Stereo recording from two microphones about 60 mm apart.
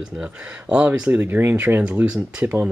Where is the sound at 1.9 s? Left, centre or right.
Right.